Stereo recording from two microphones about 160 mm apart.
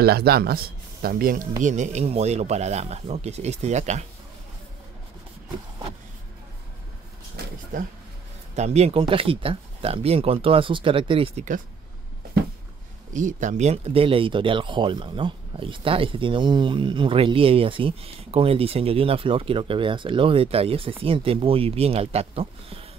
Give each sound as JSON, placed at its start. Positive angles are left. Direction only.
{"t": 0.0, "sound": "speech", "side_deg": -80}
{"t": 1.6, "sound": "speech", "side_deg": -50}
{"t": 8.5, "sound": "speech", "side_deg": -45}
{"t": 13.1, "sound": "speech", "side_deg": -50}